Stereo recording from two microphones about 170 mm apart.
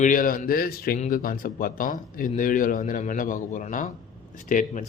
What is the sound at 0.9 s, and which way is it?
A man's voice, 50° left (ahead or behind).